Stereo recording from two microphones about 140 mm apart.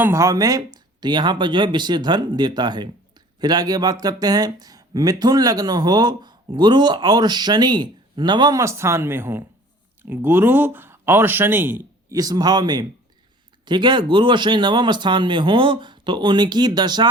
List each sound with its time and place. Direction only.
0.0 s speech: 20° right (ahead or behind)
12.0 s speech: 25° right (ahead or behind)